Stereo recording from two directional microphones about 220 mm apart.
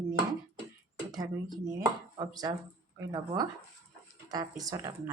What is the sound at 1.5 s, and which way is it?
A woman's voice, 20° right (ahead or behind).